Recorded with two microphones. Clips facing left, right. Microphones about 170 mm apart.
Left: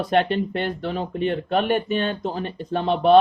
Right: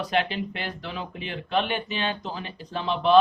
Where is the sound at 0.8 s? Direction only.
40° left (ahead or behind).